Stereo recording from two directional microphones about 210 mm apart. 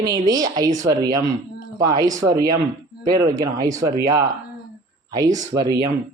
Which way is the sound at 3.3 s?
15° right (ahead or behind).